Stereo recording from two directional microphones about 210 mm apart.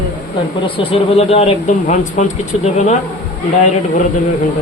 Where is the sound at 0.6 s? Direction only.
25° left (ahead or behind).